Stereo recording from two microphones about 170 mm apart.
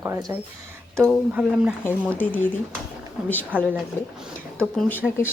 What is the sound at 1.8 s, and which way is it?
Speech, 10° left (ahead or behind).